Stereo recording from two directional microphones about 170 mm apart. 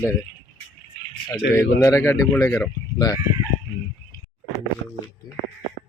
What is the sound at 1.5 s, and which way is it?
Speech, 15° left (ahead or behind).